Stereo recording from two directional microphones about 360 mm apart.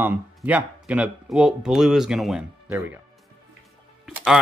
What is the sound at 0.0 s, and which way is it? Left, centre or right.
Speech, centre.